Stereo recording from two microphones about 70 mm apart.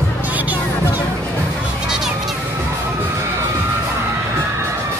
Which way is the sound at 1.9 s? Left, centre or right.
Centre.